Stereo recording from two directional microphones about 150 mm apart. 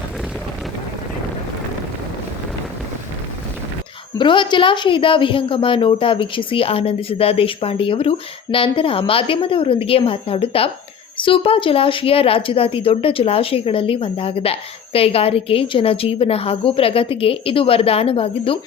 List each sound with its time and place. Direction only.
4.2 s a woman's voice: 30° left (ahead or behind)